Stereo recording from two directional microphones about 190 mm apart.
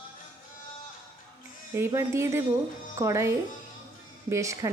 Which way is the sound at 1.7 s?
15° right (ahead or behind).